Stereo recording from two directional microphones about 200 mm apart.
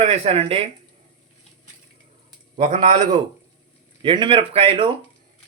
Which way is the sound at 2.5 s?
35° right (ahead or behind).